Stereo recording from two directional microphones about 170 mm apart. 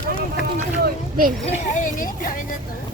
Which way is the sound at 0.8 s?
55° right (ahead or behind).